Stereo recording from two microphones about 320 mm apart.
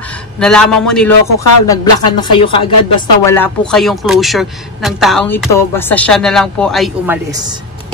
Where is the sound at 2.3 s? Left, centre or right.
Centre.